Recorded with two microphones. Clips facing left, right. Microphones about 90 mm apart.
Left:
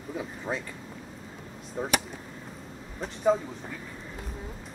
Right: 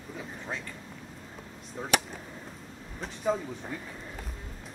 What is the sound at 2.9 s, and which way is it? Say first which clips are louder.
Speech: left 5 dB; centre (ahead or behind).